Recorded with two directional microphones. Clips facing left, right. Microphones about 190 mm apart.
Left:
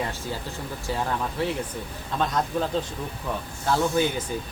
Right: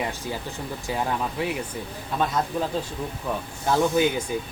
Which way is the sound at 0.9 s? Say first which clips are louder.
Right 1 dB; 15° right (ahead or behind).